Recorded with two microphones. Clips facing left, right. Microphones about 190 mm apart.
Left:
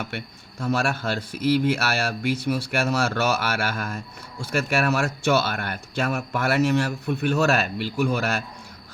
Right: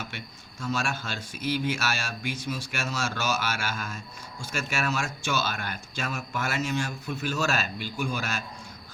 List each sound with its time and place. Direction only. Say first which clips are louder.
0.6 s speech: left 6 dB; 60° left (ahead or behind)